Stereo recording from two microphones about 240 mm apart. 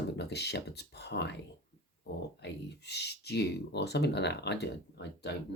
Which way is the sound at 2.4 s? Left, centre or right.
Left.